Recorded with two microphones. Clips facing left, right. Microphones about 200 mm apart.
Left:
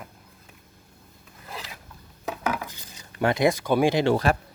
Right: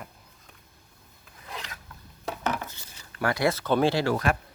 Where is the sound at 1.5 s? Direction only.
5° left (ahead or behind).